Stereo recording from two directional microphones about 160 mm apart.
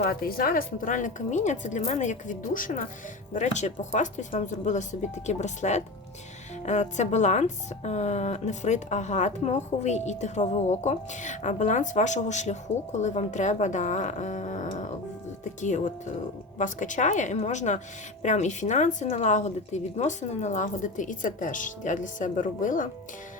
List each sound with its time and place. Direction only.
0.0 s a woman's voice: 70° left (ahead or behind)